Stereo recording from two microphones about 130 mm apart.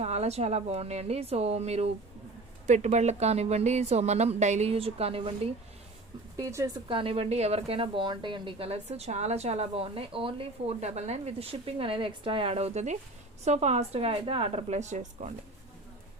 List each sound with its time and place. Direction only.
0.0 s a woman's voice: 55° right (ahead or behind)
6.3 s speech: 25° right (ahead or behind)
6.8 s a woman's voice: 45° right (ahead or behind); by 15.4 s 65° right (ahead or behind)